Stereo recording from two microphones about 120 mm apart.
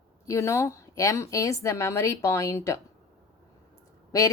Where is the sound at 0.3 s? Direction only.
25° left (ahead or behind).